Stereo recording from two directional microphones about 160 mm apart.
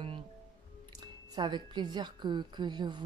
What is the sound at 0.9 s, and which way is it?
A woman's voice, 25° right (ahead or behind).